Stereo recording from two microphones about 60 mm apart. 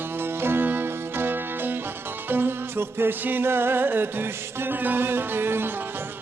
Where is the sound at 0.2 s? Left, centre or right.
Right.